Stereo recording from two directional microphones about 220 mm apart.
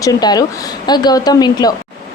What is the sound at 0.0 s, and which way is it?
A woman's voice, 15° left (ahead or behind).